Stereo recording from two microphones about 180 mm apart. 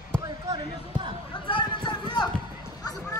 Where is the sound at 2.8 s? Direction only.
20° left (ahead or behind).